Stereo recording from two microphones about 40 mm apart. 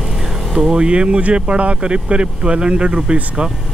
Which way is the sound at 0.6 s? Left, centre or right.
Right.